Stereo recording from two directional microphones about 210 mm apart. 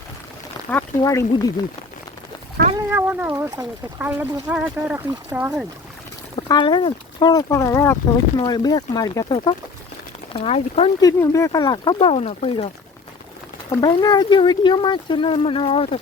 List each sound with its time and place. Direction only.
0.7 s speech: 10° left (ahead or behind)
2.7 s speech: 10° right (ahead or behind)
6.5 s speech: 20° left (ahead or behind)
11.0 s speech: 15° left (ahead or behind); by 12.7 s 30° left (ahead or behind)
13.7 s speech: 20° left (ahead or behind)